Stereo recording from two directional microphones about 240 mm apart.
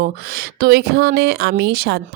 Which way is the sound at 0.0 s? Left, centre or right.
Right.